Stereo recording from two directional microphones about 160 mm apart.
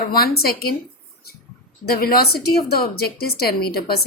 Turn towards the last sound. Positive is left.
turn(degrees=75)  # may be behind; listen again after turning